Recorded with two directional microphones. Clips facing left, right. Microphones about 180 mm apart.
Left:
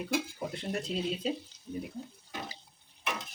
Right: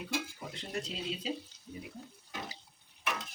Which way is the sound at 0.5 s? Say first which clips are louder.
Left 5 dB; 55° left (ahead or behind).